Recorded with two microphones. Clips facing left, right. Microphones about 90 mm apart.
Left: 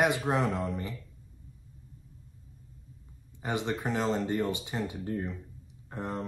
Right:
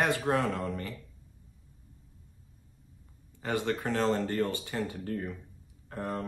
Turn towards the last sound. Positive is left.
turn(degrees=20)  # may be behind; listen again after turning